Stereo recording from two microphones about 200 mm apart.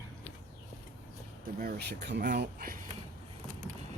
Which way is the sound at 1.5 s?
50° right (ahead or behind).